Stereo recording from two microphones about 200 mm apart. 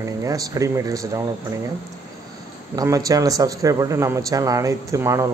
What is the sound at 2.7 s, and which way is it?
A man's voice, 15° right (ahead or behind).